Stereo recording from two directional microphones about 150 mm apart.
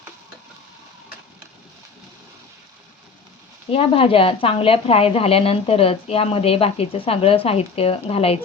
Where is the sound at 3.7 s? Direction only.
40° left (ahead or behind).